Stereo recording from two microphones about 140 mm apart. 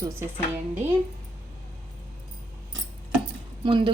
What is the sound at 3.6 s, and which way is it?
Speech, 35° right (ahead or behind).